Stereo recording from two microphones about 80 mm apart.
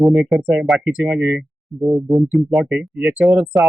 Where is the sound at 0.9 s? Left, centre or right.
Right.